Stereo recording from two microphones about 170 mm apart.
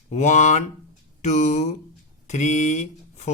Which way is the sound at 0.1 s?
45° left (ahead or behind).